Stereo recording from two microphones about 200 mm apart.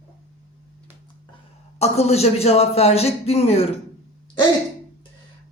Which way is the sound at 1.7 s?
30° left (ahead or behind).